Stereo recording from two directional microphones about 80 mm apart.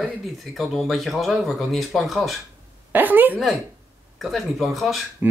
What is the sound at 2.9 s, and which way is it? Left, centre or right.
Speech, right.